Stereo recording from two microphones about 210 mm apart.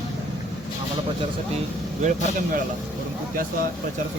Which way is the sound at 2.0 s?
35° right (ahead or behind).